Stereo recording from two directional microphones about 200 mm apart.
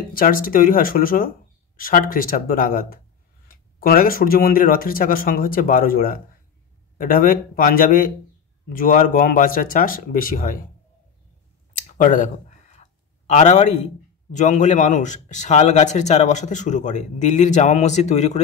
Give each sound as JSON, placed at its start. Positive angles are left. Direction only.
{"t": 0.1, "sound": "speech", "side_deg": 45}
{"t": 11.9, "sound": "a sound", "side_deg": 40}
{"t": 13.3, "sound": "a man's voice", "side_deg": 35}